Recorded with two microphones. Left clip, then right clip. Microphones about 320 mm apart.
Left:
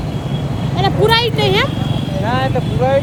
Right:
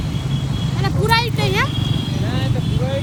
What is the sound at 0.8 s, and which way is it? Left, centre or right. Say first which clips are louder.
Speech: left 5 dB; centre.